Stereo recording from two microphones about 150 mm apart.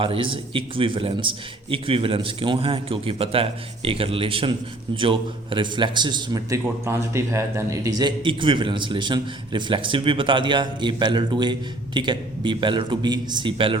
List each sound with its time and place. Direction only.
0.0 s a man's voice: 35° right (ahead or behind)